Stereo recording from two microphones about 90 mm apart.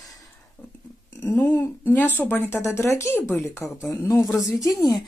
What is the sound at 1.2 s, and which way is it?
Speech, 25° left (ahead or behind).